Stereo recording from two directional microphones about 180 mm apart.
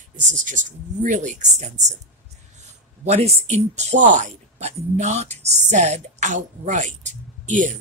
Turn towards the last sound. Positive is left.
turn(degrees=-40)  # may be behind; listen again after turning